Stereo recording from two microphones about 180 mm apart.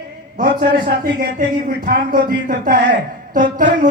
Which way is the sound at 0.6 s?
70° right (ahead or behind).